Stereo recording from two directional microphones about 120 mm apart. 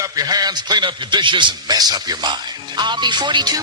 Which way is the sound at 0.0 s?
30° right (ahead or behind).